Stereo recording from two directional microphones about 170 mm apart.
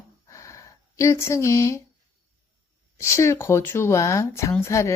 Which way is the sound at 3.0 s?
15° left (ahead or behind).